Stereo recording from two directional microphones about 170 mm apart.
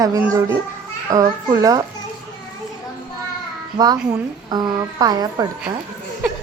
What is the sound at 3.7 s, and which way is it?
Speech, 25° right (ahead or behind).